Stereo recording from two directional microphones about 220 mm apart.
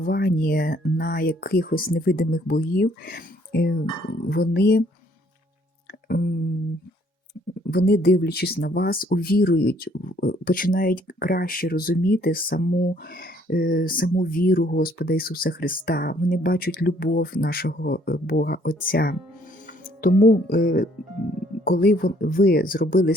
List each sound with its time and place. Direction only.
0.0 s speech: 45° left (ahead or behind)
6.1 s a sound: 45° left (ahead or behind)
7.7 s speech: 45° left (ahead or behind)